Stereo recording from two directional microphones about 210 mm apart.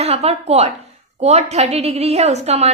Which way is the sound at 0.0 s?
30° right (ahead or behind).